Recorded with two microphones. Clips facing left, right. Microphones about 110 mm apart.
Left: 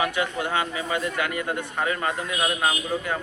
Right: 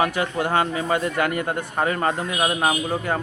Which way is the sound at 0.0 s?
45° right (ahead or behind).